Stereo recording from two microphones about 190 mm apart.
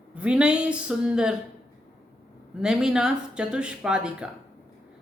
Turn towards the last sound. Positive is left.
turn(degrees=-5)  # may be behind; listen again after turning